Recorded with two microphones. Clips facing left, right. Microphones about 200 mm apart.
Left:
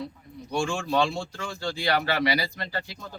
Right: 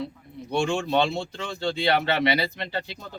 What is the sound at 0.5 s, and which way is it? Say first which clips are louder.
Speech: right 2 dB; 20° right (ahead or behind).